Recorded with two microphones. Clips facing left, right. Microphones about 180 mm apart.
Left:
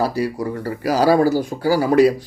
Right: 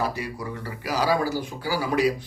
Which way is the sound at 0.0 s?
35° left (ahead or behind).